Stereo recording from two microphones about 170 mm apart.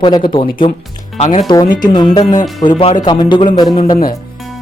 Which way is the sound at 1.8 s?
25° left (ahead or behind).